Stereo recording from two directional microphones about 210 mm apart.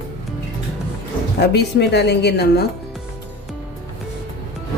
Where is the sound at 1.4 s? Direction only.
50° left (ahead or behind).